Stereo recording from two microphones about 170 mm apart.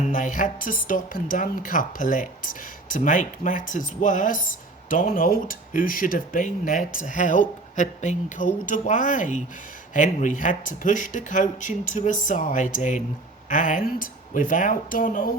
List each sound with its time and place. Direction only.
0.0 s speech: 50° left (ahead or behind)